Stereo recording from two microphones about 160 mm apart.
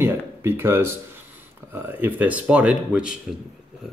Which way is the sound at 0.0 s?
15° right (ahead or behind).